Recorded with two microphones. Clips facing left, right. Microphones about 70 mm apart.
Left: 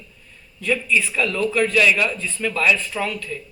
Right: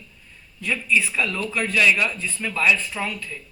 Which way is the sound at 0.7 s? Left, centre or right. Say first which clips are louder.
Left 2 dB; right.